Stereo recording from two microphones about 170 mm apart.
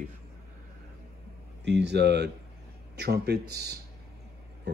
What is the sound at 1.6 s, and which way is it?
Speech, 90° right.